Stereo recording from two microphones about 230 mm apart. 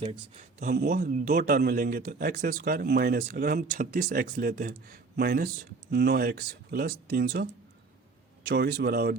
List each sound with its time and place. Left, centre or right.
0.0 s speech: right
0.7 s a man's voice: right
8.4 s speech: right